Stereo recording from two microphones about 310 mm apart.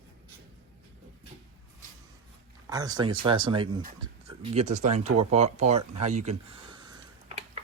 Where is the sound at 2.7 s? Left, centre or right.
Centre.